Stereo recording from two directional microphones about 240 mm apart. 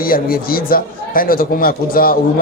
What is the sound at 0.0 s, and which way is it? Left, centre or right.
Speech, left.